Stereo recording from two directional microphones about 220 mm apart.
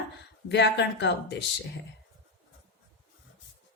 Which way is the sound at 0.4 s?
50° left (ahead or behind).